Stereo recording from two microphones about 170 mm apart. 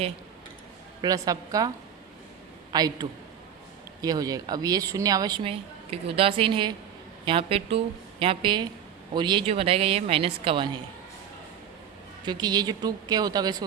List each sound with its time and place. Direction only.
1.0 s a woman's voice: 20° right (ahead or behind)
2.7 s a woman's voice: 25° right (ahead or behind)
12.2 s a woman's voice: 25° right (ahead or behind)